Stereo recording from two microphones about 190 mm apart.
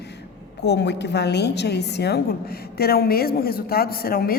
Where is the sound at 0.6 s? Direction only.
65° left (ahead or behind).